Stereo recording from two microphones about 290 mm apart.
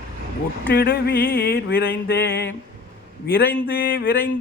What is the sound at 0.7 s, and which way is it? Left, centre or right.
Speech, left.